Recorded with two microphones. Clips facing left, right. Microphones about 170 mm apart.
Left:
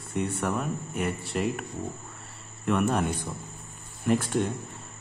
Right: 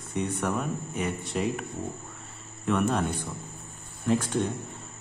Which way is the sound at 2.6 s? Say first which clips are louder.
Left 1 dB; 5° left (ahead or behind).